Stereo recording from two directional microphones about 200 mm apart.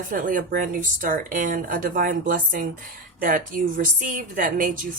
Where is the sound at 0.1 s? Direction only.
40° right (ahead or behind).